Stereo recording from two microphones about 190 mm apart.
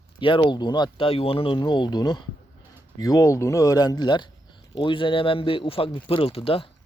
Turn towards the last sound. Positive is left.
turn(degrees=30)  # may be behind; listen again after turning